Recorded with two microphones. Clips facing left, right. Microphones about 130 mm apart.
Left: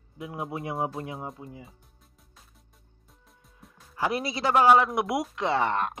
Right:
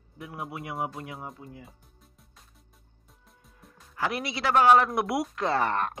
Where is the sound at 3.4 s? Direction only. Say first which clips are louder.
Even; centre (ahead or behind).